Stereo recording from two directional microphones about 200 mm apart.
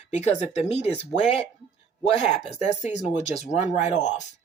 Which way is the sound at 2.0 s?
30° left (ahead or behind).